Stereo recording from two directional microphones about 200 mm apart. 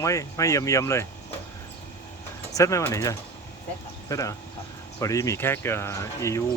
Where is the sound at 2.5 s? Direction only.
15° left (ahead or behind).